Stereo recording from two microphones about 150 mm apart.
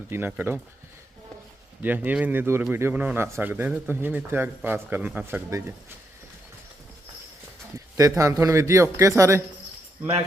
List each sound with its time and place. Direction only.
0.1 s a man's voice: 15° right (ahead or behind)
1.8 s a man's voice: 10° right (ahead or behind)
7.9 s a man's voice: 20° right (ahead or behind)